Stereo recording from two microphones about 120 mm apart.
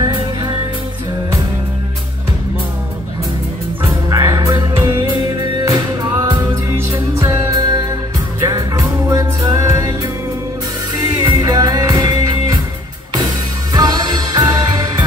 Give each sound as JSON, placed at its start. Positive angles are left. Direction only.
{"t": 0.0, "sound": "music", "side_deg": -35}
{"t": 4.1, "sound": "music", "side_deg": -30}
{"t": 6.8, "sound": "music", "side_deg": -25}
{"t": 13.7, "sound": "music", "side_deg": -35}